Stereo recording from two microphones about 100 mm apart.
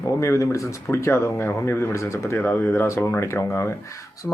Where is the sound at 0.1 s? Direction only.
30° left (ahead or behind).